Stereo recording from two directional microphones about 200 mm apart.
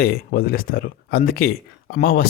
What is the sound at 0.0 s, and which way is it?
Speech, 50° left (ahead or behind).